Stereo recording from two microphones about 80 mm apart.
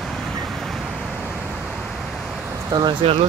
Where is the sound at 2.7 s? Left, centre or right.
Right.